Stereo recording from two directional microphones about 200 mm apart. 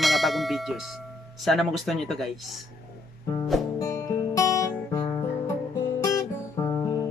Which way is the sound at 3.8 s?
15° left (ahead or behind).